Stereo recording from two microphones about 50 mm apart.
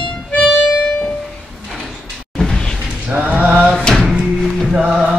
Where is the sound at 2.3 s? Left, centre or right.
Centre.